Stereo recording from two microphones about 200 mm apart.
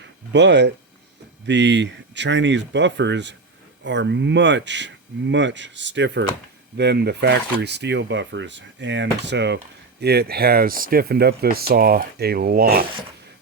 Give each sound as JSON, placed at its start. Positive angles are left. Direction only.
{"t": 0.3, "sound": "speech", "side_deg": -60}